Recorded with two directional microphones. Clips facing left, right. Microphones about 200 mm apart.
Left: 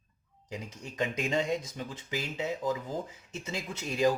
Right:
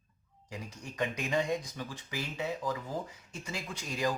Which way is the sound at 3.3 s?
25° left (ahead or behind).